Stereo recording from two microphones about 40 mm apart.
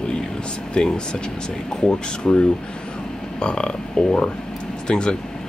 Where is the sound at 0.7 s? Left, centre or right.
Centre.